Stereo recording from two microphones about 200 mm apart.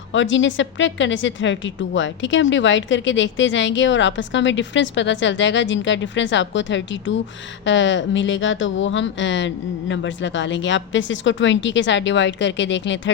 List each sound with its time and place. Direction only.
0.1 s a woman's voice: 70° left (ahead or behind)